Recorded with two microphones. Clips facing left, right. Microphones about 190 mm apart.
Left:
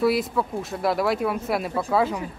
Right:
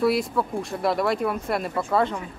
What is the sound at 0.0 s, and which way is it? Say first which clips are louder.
Speech: even; centre (ahead or behind).